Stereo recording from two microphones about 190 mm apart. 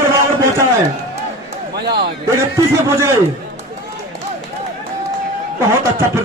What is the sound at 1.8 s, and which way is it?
Speech, 60° right (ahead or behind).